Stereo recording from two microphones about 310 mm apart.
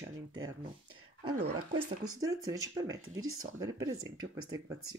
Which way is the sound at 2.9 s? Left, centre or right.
Right.